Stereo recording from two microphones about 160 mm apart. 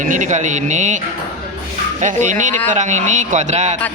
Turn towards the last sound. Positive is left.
turn(degrees=-50)  # may be behind; listen again after turning